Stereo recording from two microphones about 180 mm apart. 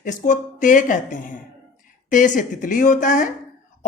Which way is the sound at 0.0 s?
45° left (ahead or behind).